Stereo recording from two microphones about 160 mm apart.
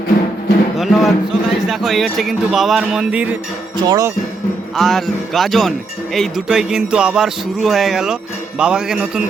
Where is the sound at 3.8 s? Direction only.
25° right (ahead or behind).